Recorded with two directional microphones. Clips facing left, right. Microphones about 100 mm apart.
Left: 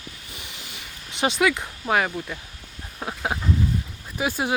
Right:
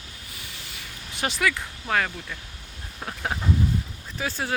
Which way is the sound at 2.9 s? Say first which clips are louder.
Left 3 dB; 15° left (ahead or behind).